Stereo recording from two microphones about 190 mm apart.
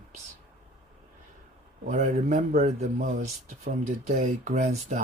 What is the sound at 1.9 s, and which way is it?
Speech, 40° right (ahead or behind).